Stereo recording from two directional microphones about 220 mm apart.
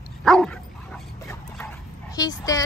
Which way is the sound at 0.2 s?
5° left (ahead or behind).